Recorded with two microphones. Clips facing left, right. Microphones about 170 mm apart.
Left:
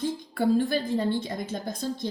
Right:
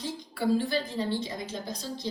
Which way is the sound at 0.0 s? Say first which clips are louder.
Left 4 dB; 50° left (ahead or behind).